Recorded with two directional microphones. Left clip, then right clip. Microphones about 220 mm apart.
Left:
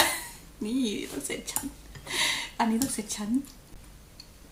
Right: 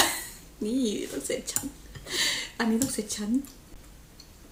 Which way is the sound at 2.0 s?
10° left (ahead or behind).